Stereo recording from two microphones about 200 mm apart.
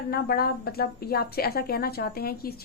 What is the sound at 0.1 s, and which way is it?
A woman's voice, 50° left (ahead or behind).